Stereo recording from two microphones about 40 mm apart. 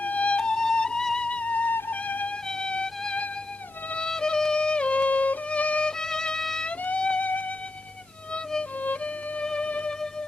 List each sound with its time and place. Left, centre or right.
0.0 s music: left
2.5 s music: left
6.0 s music: centre
7.0 s music: left
7.3 s music: left
8.8 s music: left